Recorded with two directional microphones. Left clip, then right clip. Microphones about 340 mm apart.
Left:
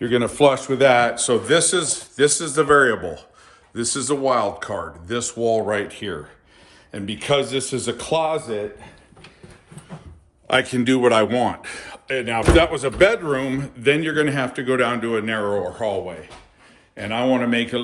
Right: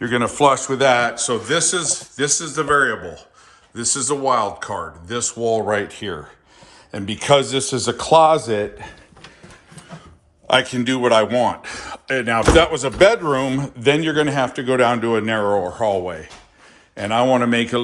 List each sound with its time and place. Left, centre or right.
0.0 s a man's voice: centre
0.5 s a man's voice: right
0.8 s a man's voice: centre; by 8.9 s right
10.4 s speech: centre